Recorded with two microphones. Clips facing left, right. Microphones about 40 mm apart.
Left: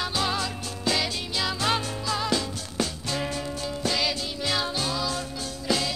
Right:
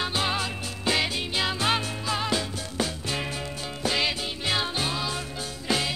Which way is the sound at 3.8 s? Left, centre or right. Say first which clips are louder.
Right 2 dB; right.